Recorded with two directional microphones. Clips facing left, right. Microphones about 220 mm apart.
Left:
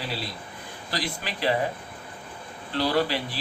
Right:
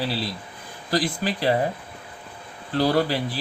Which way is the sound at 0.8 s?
40° right (ahead or behind).